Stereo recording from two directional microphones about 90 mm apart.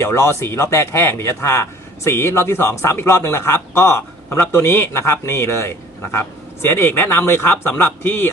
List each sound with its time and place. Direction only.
0.0 s a man's voice: 30° left (ahead or behind)